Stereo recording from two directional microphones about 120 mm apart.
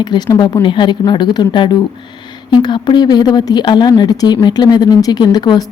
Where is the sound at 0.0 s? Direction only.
35° left (ahead or behind).